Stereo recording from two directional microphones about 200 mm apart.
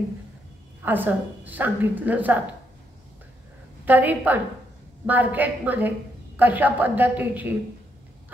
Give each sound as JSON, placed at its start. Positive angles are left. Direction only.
{"t": 0.8, "sound": "a woman's voice", "side_deg": -10}
{"t": 3.8, "sound": "a woman's voice", "side_deg": -10}